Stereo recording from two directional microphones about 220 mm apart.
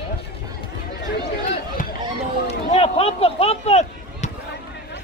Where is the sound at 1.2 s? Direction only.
40° left (ahead or behind).